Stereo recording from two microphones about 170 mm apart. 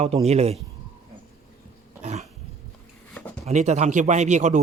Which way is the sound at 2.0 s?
40° right (ahead or behind).